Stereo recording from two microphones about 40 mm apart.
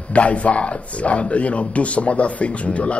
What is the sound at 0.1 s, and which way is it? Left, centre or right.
Speech, left.